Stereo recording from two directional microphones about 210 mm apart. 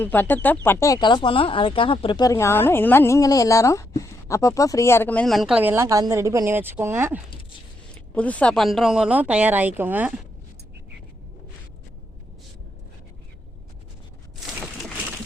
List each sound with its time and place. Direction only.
0.0 s speech: 10° left (ahead or behind); by 7.2 s 10° right (ahead or behind)
8.1 s speech: 5° left (ahead or behind)